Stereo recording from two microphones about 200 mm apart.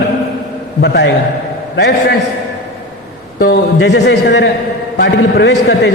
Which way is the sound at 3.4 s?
55° left (ahead or behind).